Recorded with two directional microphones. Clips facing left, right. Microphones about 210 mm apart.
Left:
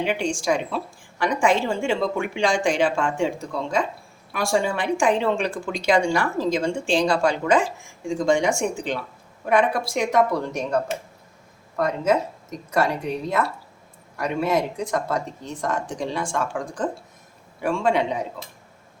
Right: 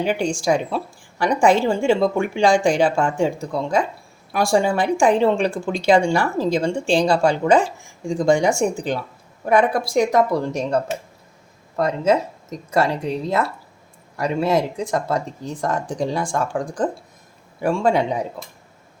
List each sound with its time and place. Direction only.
0.0 s a woman's voice: 40° right (ahead or behind)
11.8 s a woman's voice: 30° right (ahead or behind)